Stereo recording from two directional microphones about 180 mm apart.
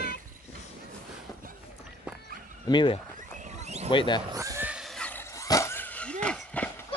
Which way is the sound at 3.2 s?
40° right (ahead or behind).